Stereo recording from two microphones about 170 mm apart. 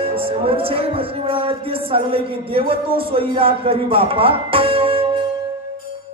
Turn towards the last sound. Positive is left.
turn(degrees=-35)  # may be behind; listen again after turning